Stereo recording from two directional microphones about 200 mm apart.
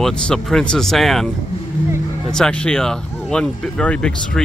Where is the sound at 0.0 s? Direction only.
5° left (ahead or behind).